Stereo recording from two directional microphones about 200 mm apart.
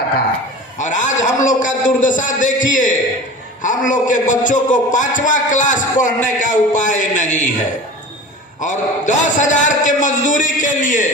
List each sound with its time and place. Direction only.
0.8 s a sound: 40° left (ahead or behind)
1.2 s a man's voice: 40° left (ahead or behind)
8.6 s a man's voice: 40° left (ahead or behind)